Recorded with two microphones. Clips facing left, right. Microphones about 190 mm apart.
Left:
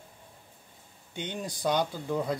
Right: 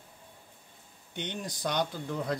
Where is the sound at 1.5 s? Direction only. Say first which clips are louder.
Left 4 dB; 10° left (ahead or behind).